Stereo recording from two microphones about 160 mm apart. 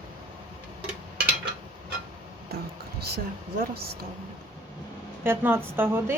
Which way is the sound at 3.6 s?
75° right (ahead or behind).